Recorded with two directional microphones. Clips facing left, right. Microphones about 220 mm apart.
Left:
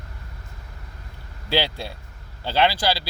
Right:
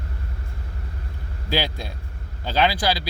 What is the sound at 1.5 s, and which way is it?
Speech, 15° right (ahead or behind).